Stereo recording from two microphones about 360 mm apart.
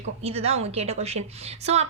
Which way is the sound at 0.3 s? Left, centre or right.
Centre.